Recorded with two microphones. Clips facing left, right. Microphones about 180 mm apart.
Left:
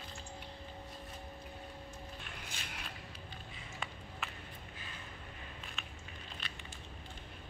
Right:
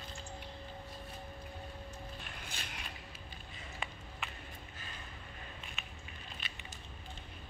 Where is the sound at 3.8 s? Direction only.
Centre (ahead or behind).